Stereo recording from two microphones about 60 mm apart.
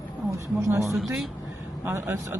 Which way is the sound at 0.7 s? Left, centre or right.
Right.